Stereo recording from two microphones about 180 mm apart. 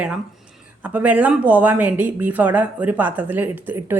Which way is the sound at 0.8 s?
10° right (ahead or behind).